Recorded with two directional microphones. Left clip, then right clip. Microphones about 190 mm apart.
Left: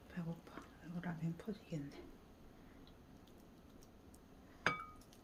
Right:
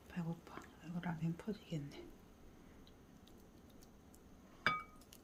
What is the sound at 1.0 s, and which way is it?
Speech, 55° right (ahead or behind).